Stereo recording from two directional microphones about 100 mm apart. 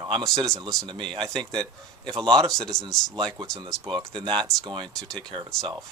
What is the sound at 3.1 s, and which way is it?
Speech, 50° right (ahead or behind).